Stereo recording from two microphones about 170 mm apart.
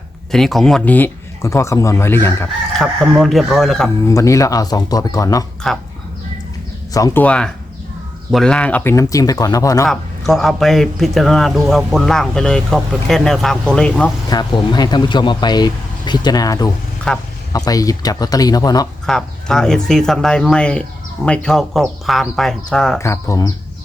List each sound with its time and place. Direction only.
0.3 s a man's voice: centre (ahead or behind)
2.7 s a man's voice: centre (ahead or behind)
4.1 s speech: 20° left (ahead or behind)
6.9 s a man's voice: 15° left (ahead or behind)
9.9 s a man's voice: centre (ahead or behind)
14.3 s speech: 25° left (ahead or behind)
17.1 s a man's voice: 5° left (ahead or behind)
17.5 s speech: 20° left (ahead or behind)
19.0 s a man's voice: 5° left (ahead or behind)
23.0 s a man's voice: 15° left (ahead or behind)